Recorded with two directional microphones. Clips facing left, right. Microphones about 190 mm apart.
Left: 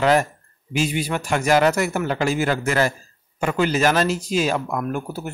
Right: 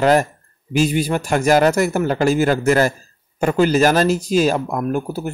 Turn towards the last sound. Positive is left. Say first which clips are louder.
# right 5 dB
turn(degrees=-35)  # may be behind; listen again after turning